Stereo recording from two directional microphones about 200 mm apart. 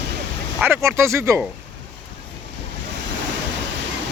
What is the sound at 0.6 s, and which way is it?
Speech, 10° right (ahead or behind).